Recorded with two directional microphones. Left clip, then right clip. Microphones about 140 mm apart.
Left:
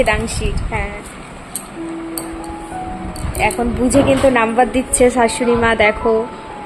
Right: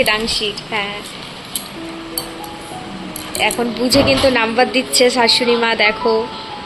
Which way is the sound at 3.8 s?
35° left (ahead or behind).